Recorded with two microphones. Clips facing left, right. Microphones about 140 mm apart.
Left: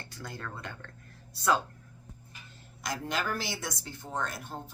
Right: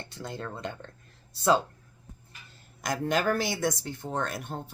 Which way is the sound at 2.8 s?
50° right (ahead or behind).